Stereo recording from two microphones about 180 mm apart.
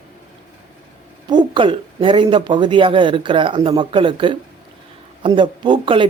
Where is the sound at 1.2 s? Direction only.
25° right (ahead or behind).